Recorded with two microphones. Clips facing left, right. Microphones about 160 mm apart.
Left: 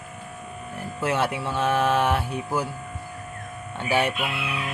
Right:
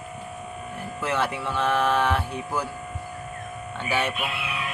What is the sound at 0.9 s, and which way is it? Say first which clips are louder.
Speech: left 2 dB; 5° left (ahead or behind).